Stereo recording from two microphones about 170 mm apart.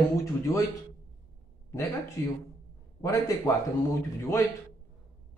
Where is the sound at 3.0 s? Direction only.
20° left (ahead or behind).